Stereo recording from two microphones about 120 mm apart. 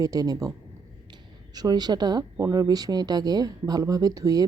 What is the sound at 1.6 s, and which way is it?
Speech, 35° right (ahead or behind).